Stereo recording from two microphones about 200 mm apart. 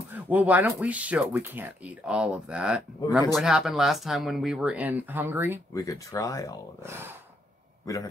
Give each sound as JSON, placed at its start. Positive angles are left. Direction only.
{"t": 0.1, "sound": "speech", "side_deg": -10}
{"t": 5.8, "sound": "speech", "side_deg": 15}
{"t": 6.8, "sound": "speech", "side_deg": -10}